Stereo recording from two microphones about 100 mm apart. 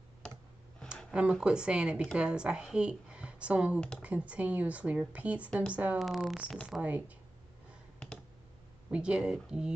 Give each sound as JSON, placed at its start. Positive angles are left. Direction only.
{"t": 0.8, "sound": "a sound", "side_deg": 10}
{"t": 1.1, "sound": "speech", "side_deg": -10}
{"t": 5.9, "sound": "speech", "side_deg": 0}
{"t": 6.8, "sound": "speech", "side_deg": -15}
{"t": 8.9, "sound": "speech", "side_deg": -10}